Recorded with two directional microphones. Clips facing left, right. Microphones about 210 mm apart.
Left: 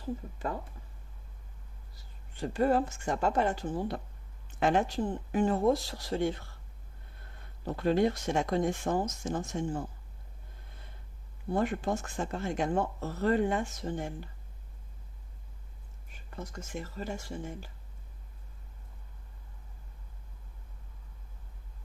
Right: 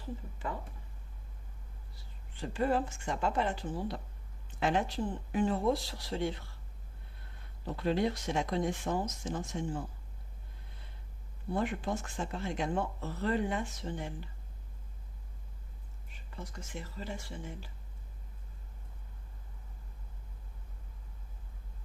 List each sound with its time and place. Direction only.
2.5 s speech: 40° left (ahead or behind)
7.6 s speech: 50° left (ahead or behind)
11.5 s speech: 45° left (ahead or behind)
16.3 s speech: 45° left (ahead or behind)